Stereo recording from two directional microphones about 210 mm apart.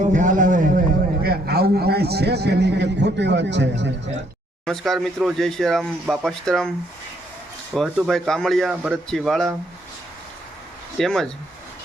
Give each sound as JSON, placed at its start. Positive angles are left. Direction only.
{"t": 0.1, "sound": "a sound", "side_deg": -35}
{"t": 1.2, "sound": "a man's voice", "side_deg": -45}
{"t": 4.6, "sound": "speech", "side_deg": 0}
{"t": 7.8, "sound": "speech", "side_deg": 0}
{"t": 10.9, "sound": "speech", "side_deg": 0}